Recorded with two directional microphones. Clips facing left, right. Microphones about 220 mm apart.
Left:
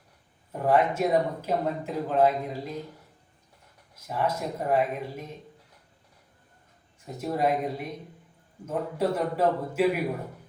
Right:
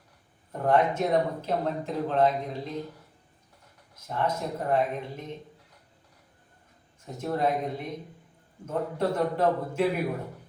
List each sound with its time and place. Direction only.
0.5 s speech: 5° left (ahead or behind)
4.0 s speech: 10° left (ahead or behind)
7.2 s speech: 10° left (ahead or behind)